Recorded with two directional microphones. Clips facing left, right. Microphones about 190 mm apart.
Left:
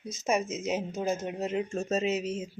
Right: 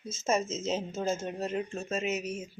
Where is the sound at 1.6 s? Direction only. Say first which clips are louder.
Left 5 dB; 45° left (ahead or behind).